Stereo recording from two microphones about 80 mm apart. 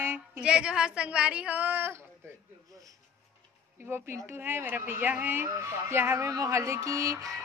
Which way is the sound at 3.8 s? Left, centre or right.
Right.